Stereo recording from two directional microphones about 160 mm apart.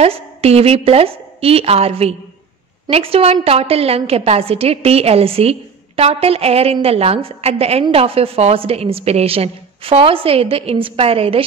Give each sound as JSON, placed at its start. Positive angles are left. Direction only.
{"t": 0.0, "sound": "a woman's voice", "side_deg": -40}